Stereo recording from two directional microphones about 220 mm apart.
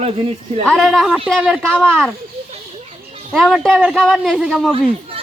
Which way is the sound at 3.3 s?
Centre (ahead or behind).